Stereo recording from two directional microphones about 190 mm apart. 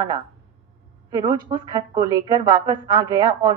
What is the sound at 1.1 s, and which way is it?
A woman's voice, 25° right (ahead or behind).